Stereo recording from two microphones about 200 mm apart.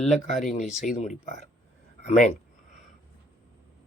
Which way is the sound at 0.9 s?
35° left (ahead or behind).